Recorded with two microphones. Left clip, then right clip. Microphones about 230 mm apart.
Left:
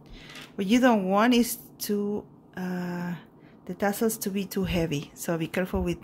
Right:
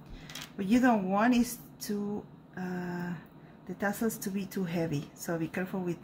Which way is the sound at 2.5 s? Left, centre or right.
Left.